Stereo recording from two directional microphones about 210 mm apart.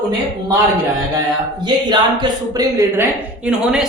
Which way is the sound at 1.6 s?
20° right (ahead or behind).